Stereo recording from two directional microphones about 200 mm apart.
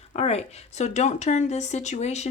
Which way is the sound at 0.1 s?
30° left (ahead or behind).